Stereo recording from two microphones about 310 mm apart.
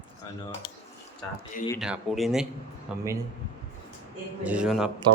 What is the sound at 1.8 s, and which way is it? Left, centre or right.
Speech, centre.